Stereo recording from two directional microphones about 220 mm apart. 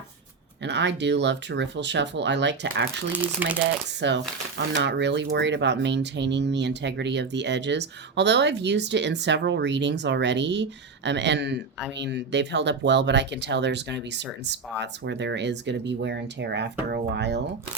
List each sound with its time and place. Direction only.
0.6 s speech: 50° right (ahead or behind)
3.1 s speech: 5° right (ahead or behind)
4.0 s speech: 55° right (ahead or behind)